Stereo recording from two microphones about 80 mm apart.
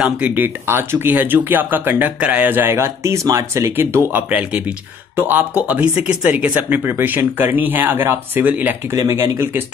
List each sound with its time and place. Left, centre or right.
0.0 s speech: centre
4.3 s speech: centre
5.1 s speech: right
8.9 s speech: right